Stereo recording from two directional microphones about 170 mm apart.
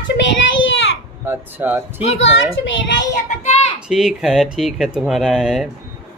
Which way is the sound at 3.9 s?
Centre (ahead or behind).